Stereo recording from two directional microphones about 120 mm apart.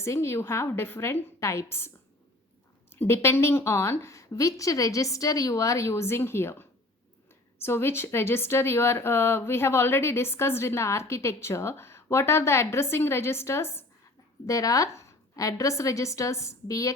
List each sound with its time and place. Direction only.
0.0 s a woman's voice: 25° left (ahead or behind)
2.9 s a woman's voice: 20° left (ahead or behind)